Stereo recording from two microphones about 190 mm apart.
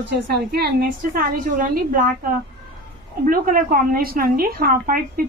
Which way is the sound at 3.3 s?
45° right (ahead or behind).